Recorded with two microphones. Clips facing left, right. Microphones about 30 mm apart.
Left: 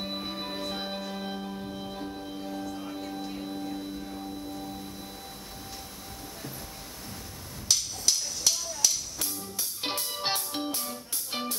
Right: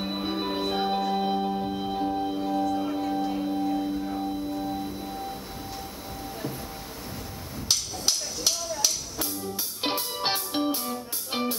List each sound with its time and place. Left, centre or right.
0.0 s organ: centre
3.2 s music: centre
8.1 s a sound: centre
9.8 s music: centre